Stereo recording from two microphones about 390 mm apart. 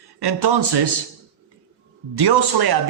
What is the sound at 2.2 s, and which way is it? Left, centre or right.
Speech, right.